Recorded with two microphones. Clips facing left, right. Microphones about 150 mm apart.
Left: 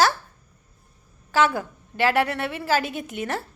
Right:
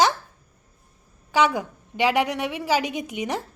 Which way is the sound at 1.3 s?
15° right (ahead or behind).